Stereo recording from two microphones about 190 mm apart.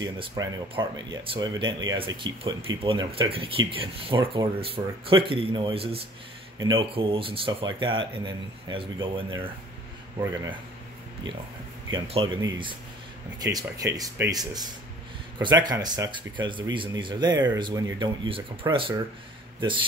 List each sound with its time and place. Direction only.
0.0 s speech: 25° right (ahead or behind)
11.9 s speech: 30° right (ahead or behind)